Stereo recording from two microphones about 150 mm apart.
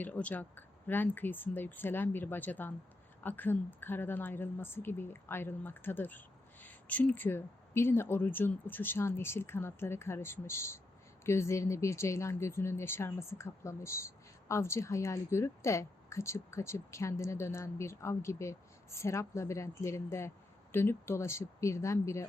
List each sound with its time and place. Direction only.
0.0 s speech: 10° left (ahead or behind)